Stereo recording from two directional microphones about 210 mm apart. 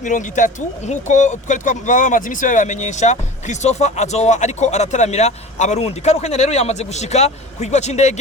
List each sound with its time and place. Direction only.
0.0 s speech: 35° left (ahead or behind)